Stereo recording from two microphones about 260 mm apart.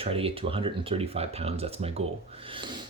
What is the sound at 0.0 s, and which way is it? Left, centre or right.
Speech, right.